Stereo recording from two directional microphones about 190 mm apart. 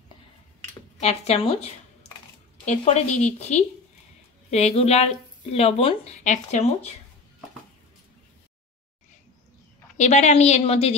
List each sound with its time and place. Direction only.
0.9 s speech: 35° left (ahead or behind)
9.9 s speech: 40° left (ahead or behind)